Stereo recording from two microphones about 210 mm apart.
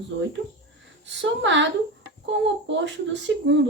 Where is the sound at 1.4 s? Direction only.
60° right (ahead or behind).